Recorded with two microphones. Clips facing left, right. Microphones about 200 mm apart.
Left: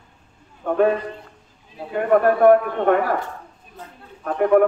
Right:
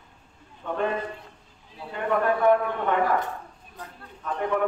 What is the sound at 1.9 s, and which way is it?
A man's voice, 50° left (ahead or behind).